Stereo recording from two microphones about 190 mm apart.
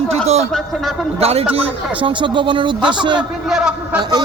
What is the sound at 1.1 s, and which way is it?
A man's voice, 30° right (ahead or behind).